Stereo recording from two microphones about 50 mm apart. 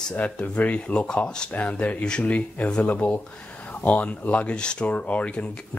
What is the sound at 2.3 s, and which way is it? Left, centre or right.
Speech, left.